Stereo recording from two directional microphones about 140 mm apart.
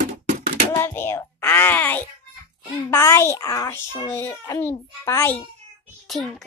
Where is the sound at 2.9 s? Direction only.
20° left (ahead or behind).